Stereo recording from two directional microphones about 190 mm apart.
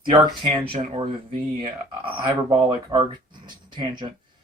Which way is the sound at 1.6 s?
25° right (ahead or behind).